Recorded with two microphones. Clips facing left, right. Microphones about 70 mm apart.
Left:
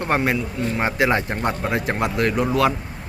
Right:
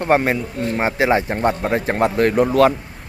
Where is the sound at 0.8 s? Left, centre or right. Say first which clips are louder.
Right 3 dB; centre; by 2.4 s right.